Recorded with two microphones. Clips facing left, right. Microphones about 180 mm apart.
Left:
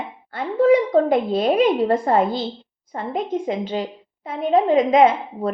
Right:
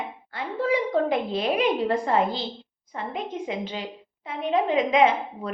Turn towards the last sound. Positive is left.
turn(degrees=35)  # may be behind; listen again after turning